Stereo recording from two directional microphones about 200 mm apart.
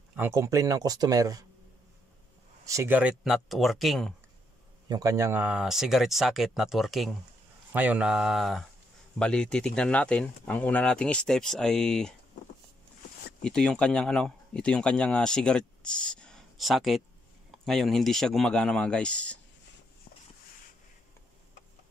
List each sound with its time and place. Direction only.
0.1 s speech: 10° right (ahead or behind)
2.6 s speech: 15° right (ahead or behind)
4.8 s speech: 15° right (ahead or behind); by 12.1 s 5° left (ahead or behind)
13.4 s speech: 5° left (ahead or behind)